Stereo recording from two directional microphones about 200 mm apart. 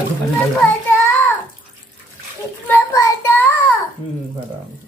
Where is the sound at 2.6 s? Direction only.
15° left (ahead or behind).